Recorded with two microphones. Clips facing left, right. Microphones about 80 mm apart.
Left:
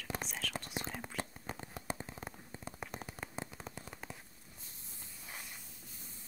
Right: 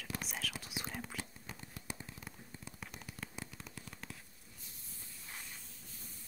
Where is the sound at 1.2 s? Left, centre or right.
Left.